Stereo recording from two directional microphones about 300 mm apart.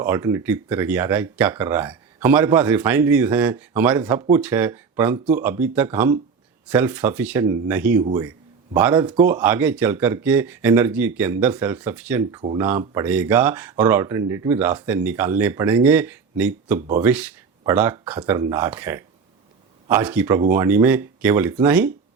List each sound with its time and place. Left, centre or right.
0.0 s speech: centre